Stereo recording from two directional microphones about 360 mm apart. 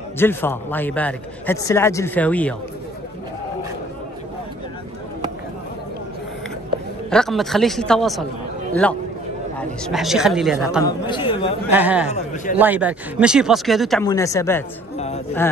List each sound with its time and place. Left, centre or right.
0.2 s a man's voice: centre
7.1 s a man's voice: centre
9.6 s a man's voice: centre
10.8 s speech: centre
11.7 s a man's voice: centre
12.1 s a man's voice: centre
12.5 s a man's voice: centre